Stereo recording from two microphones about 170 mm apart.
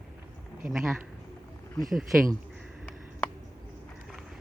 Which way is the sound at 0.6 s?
Centre (ahead or behind).